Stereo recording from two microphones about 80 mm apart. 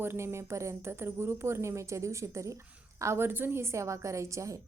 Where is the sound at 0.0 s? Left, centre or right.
Right.